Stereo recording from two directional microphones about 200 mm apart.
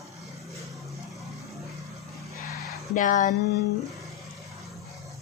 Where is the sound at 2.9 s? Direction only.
40° left (ahead or behind).